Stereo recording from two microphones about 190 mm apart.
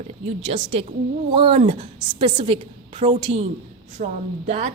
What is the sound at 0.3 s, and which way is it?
A woman's voice, 35° right (ahead or behind).